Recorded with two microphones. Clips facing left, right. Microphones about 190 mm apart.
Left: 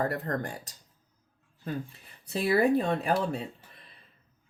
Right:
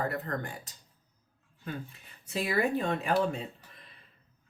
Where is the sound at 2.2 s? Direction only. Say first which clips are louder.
Left 5 dB; 35° left (ahead or behind).